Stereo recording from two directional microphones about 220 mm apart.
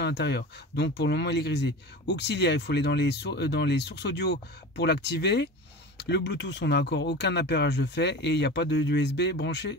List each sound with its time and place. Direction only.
0.0 s speech: 50° left (ahead or behind)